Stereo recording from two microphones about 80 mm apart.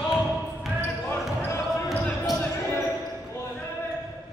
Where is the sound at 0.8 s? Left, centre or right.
Left.